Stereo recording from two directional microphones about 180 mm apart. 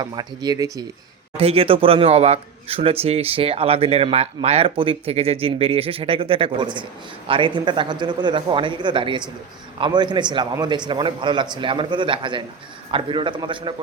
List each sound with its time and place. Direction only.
0.0 s a man's voice: 20° right (ahead or behind)
1.4 s a man's voice: 30° right (ahead or behind)